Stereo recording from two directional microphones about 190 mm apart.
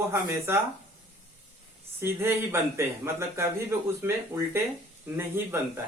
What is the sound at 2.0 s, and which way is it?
Speech, 15° right (ahead or behind).